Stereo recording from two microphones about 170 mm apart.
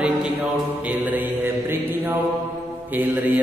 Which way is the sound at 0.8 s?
10° right (ahead or behind).